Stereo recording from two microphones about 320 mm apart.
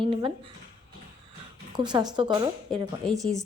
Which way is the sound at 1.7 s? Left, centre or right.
Centre.